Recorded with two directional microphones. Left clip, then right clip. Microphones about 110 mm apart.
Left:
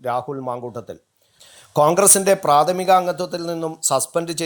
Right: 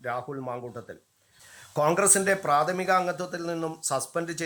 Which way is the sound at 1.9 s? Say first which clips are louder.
Left 8 dB; 35° left (ahead or behind).